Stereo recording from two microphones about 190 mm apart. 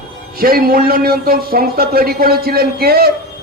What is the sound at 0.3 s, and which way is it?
A man's voice, 50° right (ahead or behind).